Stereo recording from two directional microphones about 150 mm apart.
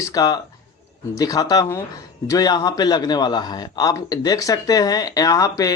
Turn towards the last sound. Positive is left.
turn(degrees=20)  # may be behind; listen again after turning